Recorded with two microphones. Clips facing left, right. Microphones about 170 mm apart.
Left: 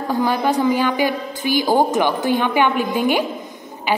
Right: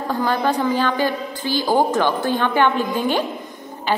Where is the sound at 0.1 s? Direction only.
10° left (ahead or behind).